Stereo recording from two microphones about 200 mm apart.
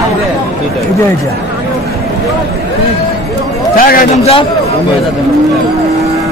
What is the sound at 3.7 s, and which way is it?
Speech, 45° left (ahead or behind).